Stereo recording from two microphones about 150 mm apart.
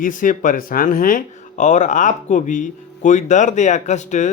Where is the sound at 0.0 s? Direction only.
60° left (ahead or behind).